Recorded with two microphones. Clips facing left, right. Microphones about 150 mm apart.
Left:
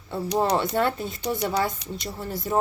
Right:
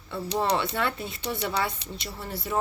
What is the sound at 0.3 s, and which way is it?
A woman's voice, 40° left (ahead or behind).